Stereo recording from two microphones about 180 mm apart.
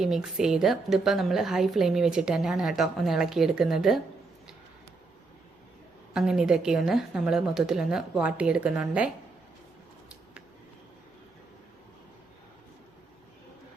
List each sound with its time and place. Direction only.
0.0 s a woman's voice: centre (ahead or behind)
6.1 s a woman's voice: 5° right (ahead or behind)